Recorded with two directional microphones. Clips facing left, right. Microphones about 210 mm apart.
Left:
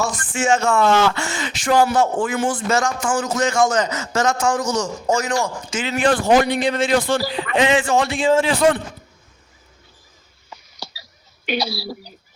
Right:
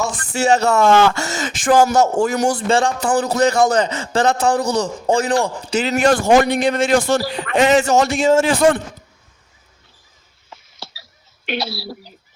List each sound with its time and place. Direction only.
0.3 s a man's voice: 35° right (ahead or behind)
10.5 s a sound: centre (ahead or behind)
11.4 s speech: centre (ahead or behind)